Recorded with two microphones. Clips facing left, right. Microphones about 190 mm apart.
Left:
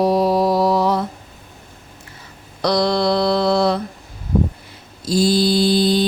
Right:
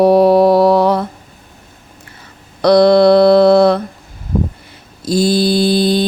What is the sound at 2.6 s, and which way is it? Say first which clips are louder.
Mantra: right 10 dB; 60° right (ahead or behind).